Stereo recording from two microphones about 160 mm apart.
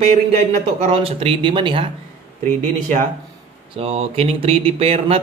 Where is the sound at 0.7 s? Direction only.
40° right (ahead or behind).